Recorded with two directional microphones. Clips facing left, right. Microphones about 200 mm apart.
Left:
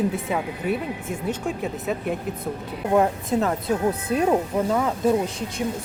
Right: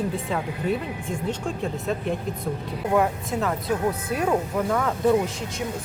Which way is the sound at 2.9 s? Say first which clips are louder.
Left 3 dB; 30° left (ahead or behind).